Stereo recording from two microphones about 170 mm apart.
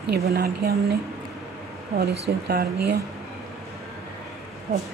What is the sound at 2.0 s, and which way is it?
Speech, 70° right (ahead or behind).